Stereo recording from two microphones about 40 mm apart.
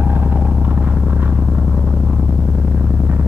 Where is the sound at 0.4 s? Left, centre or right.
Right.